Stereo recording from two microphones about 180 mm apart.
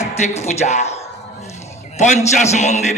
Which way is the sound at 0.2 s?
40° left (ahead or behind).